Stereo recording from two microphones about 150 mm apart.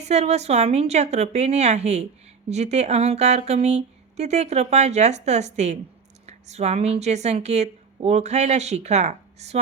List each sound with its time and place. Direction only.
0.0 s a woman's voice: 45° right (ahead or behind)